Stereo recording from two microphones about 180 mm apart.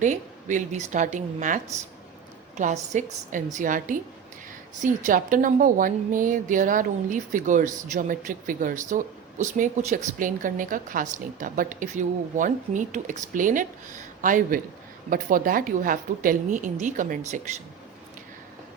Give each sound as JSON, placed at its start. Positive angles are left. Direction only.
{"t": 0.0, "sound": "a woman's voice", "side_deg": -40}